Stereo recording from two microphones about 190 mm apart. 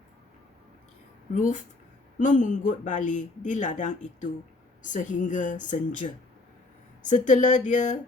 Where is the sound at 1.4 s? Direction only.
40° left (ahead or behind).